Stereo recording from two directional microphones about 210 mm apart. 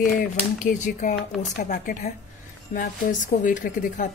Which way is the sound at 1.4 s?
40° left (ahead or behind).